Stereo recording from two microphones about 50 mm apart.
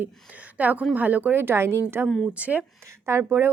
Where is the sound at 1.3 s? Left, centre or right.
Right.